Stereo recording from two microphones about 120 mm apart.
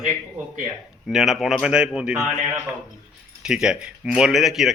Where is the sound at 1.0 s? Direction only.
Centre (ahead or behind).